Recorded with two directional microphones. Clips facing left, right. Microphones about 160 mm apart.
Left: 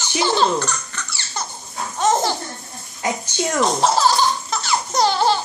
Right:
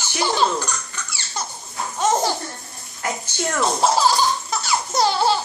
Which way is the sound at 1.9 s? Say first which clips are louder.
Left 1 dB; 10° right (ahead or behind).